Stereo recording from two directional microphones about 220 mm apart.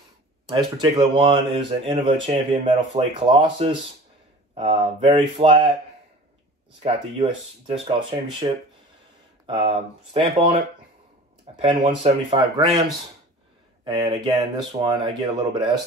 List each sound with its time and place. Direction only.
0.5 s speech: 20° right (ahead or behind)
6.8 s speech: 25° right (ahead or behind)
9.5 s speech: 25° right (ahead or behind)
11.6 s speech: 25° right (ahead or behind)
13.8 s speech: 20° right (ahead or behind)